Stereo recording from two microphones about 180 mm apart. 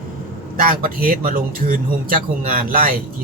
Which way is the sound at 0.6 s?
50° right (ahead or behind).